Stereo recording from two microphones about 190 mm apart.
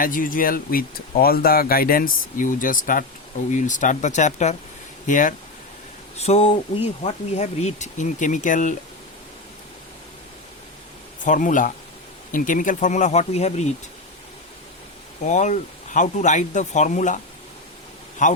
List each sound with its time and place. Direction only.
0.0 s speech: 45° left (ahead or behind)
6.1 s speech: 35° left (ahead or behind)
11.2 s speech: 40° left (ahead or behind)
15.2 s speech: 40° left (ahead or behind)
18.2 s speech: 40° left (ahead or behind)